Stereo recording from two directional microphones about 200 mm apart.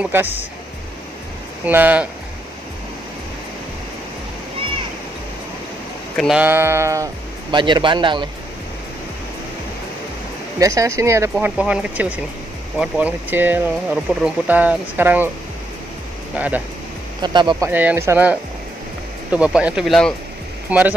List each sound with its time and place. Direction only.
0.0 s speech: 10° right (ahead or behind)
1.7 s speech: 10° right (ahead or behind)
6.1 s a man's voice: 5° right (ahead or behind); by 8.3 s 25° right (ahead or behind)
10.6 s speech: 15° right (ahead or behind)
16.3 s speech: 10° right (ahead or behind)
17.2 s a man's voice: 20° right (ahead or behind)
17.6 s speech: 10° right (ahead or behind)